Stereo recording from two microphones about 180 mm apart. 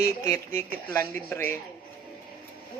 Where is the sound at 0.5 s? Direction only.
15° left (ahead or behind).